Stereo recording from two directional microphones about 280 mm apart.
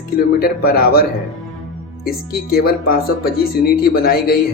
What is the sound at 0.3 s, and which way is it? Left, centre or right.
Speech, left.